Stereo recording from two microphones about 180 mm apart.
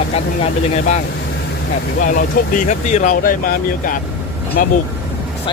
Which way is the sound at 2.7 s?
40° left (ahead or behind).